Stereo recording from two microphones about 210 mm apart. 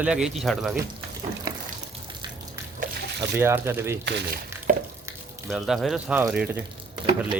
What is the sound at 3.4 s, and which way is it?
Speech, 10° right (ahead or behind).